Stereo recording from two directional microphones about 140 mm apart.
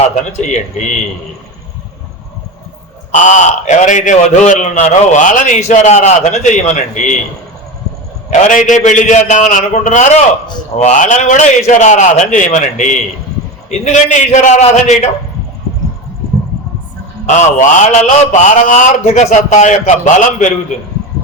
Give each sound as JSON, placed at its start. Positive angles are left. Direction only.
{"t": 0.4, "sound": "a man's voice", "side_deg": 60}
{"t": 3.1, "sound": "a man's voice", "side_deg": 60}
{"t": 8.3, "sound": "a man's voice", "side_deg": 65}
{"t": 17.2, "sound": "a man's voice", "side_deg": 60}